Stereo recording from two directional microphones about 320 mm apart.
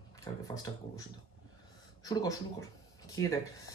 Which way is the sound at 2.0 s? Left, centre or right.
Centre.